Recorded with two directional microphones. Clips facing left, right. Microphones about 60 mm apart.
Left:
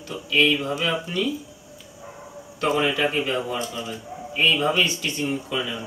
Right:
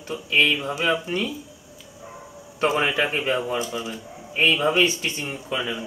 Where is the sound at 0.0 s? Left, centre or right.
Right.